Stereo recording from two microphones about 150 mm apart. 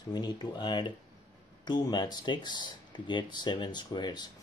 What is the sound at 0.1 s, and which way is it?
Speech, 30° left (ahead or behind).